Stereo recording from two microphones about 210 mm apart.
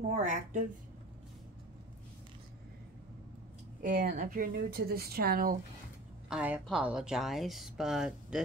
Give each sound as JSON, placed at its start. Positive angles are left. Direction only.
{"t": 0.1, "sound": "a woman's voice", "side_deg": -35}
{"t": 3.8, "sound": "speech", "side_deg": -45}
{"t": 6.2, "sound": "a woman's voice", "side_deg": -5}